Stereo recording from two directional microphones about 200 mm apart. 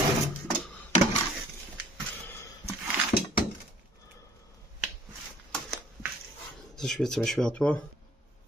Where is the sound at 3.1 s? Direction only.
50° left (ahead or behind).